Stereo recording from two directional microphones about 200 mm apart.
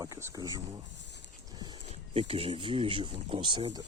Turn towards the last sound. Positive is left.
turn(degrees=-25)  # may be behind; listen again after turning